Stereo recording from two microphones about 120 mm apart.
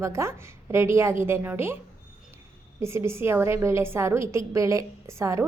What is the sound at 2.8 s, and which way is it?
A woman's voice, 25° right (ahead or behind).